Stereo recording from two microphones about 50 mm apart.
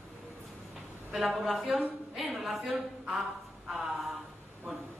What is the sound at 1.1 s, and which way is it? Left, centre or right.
Speech, centre.